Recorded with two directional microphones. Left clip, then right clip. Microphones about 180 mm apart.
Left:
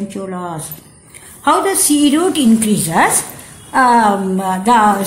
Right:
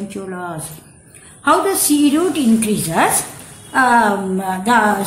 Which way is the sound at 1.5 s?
25° left (ahead or behind).